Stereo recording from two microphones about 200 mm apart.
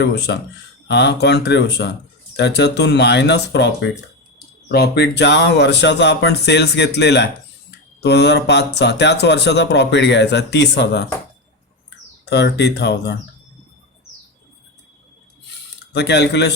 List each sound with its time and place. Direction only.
0.0 s speech: 55° left (ahead or behind)
12.2 s speech: 55° left (ahead or behind)
15.9 s speech: 55° left (ahead or behind)